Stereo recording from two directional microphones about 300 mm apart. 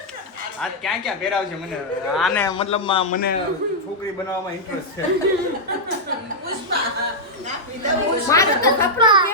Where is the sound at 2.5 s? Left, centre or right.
Centre.